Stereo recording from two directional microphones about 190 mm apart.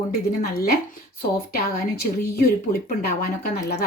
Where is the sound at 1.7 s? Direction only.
50° left (ahead or behind).